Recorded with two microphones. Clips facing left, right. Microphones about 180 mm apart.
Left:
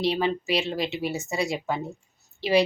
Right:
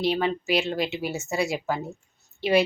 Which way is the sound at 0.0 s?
Centre (ahead or behind).